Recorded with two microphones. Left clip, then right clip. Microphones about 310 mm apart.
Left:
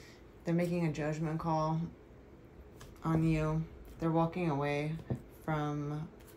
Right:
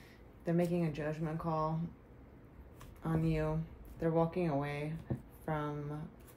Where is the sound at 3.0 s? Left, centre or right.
Left.